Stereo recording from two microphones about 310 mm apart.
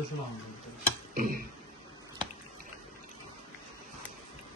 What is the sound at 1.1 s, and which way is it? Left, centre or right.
Tick-tock, right.